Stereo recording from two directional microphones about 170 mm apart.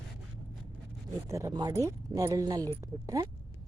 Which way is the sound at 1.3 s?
20° right (ahead or behind).